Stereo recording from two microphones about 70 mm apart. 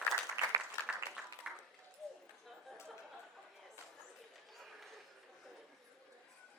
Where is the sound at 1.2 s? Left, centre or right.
Centre.